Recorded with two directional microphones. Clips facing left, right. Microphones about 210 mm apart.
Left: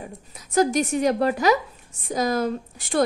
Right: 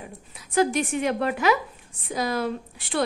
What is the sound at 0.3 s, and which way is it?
A woman's voice, 40° left (ahead or behind).